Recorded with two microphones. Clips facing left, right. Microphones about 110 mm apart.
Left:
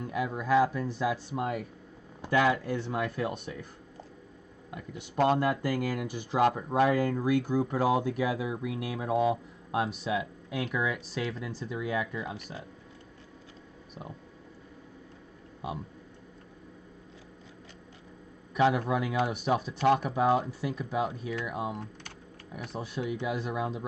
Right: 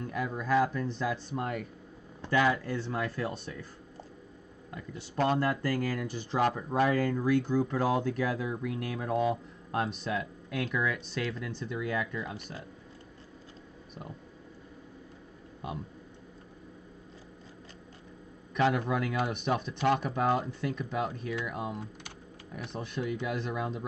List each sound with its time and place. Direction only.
0.0 s a sound: 10° left (ahead or behind)
0.4 s speech: 10° left (ahead or behind)
2.2 s speech: 20° left (ahead or behind)
4.9 s speech: 20° left (ahead or behind)
18.5 s speech: 5° left (ahead or behind)